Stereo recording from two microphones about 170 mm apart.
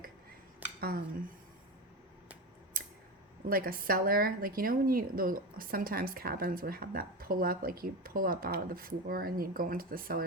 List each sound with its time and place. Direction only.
0.8 s speech: 65° right (ahead or behind)
2.8 s scissors: 60° right (ahead or behind)
3.5 s speech: 60° right (ahead or behind)